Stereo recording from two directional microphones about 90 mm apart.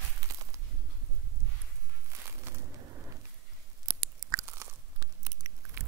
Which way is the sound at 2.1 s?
30° right (ahead or behind).